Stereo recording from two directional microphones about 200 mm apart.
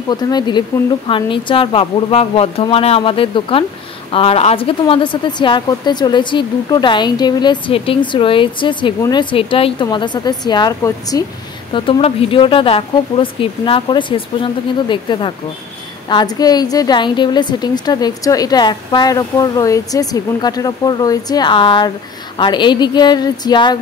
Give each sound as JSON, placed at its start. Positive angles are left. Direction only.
{"t": 0.1, "sound": "a woman's voice", "side_deg": 20}